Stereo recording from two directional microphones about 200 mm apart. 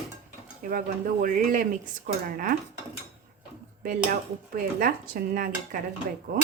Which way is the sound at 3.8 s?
45° right (ahead or behind).